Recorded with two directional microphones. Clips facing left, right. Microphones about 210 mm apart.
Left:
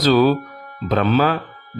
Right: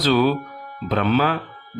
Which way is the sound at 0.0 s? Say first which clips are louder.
Left 3 dB; 45° left (ahead or behind).